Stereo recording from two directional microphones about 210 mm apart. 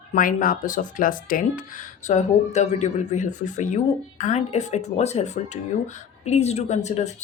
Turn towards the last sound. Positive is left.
turn(degrees=35)  # may be behind; listen again after turning